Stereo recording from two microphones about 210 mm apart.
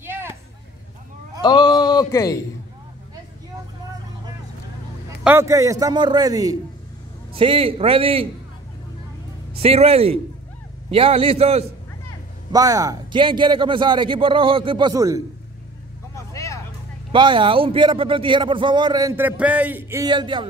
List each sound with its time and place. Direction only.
0.0 s a sound: 10° right (ahead or behind)
1.4 s a sound: 20° left (ahead or behind)
5.2 s a man's voice: 10° right (ahead or behind)
9.6 s a man's voice: 30° right (ahead or behind)
12.5 s a man's voice: 15° right (ahead or behind)
17.1 s a man's voice: 25° right (ahead or behind)